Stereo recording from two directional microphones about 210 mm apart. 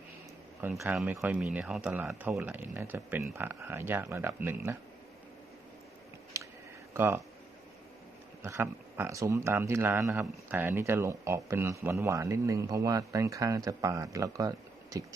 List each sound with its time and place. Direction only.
0.6 s speech: 5° right (ahead or behind)
6.3 s a sound: 15° right (ahead or behind)
6.9 s speech: 10° right (ahead or behind)
8.4 s speech: 15° right (ahead or behind)